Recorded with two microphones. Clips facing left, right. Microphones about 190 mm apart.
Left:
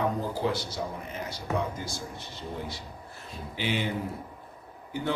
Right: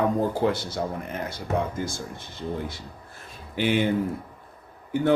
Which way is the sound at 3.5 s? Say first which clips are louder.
Right 7 dB; 55° right (ahead or behind).